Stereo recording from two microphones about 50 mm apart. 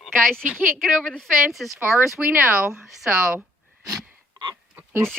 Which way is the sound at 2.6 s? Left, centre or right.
Centre.